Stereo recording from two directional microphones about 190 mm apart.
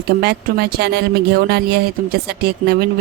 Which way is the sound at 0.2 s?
55° right (ahead or behind).